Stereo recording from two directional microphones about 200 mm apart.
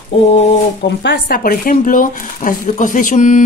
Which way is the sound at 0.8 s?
55° left (ahead or behind).